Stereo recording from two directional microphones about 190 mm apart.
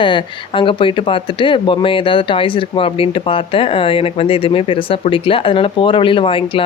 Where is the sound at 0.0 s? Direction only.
25° left (ahead or behind).